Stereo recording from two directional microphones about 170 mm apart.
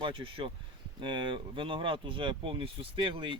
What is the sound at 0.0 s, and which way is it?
Speech, 30° right (ahead or behind).